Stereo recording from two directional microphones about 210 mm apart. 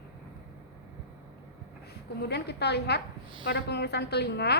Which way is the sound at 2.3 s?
50° left (ahead or behind).